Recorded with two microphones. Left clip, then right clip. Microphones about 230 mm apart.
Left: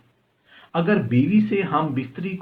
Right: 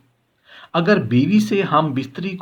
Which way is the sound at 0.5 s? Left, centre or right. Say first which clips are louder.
Right 5 dB; right.